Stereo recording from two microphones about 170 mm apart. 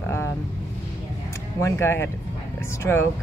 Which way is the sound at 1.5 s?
15° left (ahead or behind).